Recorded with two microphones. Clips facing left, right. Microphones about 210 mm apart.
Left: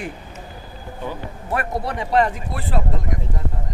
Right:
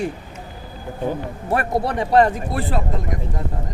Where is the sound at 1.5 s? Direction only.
35° right (ahead or behind).